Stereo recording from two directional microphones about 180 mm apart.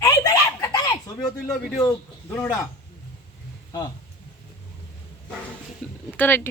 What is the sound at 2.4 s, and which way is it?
Speech, 15° left (ahead or behind).